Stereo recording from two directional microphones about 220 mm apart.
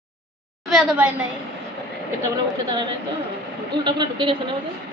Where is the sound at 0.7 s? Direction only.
Centre (ahead or behind).